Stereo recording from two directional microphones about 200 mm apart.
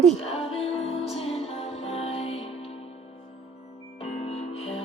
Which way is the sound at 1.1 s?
30° left (ahead or behind).